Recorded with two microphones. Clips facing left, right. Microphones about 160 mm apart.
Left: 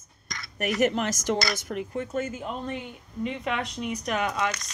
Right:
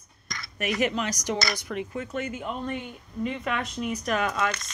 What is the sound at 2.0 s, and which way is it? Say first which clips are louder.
Speech: left 2 dB; 30° left (ahead or behind).